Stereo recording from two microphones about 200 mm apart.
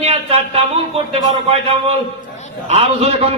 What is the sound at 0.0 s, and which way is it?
Speech, 30° right (ahead or behind).